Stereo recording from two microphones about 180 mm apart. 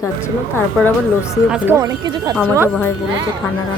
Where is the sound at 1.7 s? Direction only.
20° right (ahead or behind).